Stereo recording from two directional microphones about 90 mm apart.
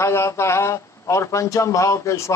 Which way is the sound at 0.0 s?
30° left (ahead or behind).